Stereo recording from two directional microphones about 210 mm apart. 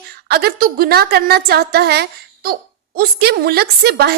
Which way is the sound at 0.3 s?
50° right (ahead or behind).